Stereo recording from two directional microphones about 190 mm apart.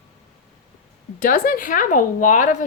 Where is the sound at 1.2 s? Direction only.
45° left (ahead or behind).